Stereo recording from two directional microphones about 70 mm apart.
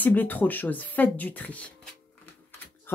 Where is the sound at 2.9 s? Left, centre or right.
Left.